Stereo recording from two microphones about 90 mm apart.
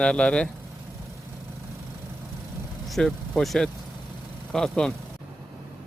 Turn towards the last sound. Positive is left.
turn(degrees=10)  # may be behind; listen again after turning